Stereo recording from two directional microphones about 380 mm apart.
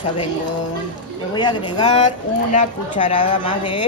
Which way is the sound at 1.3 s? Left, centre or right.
Centre.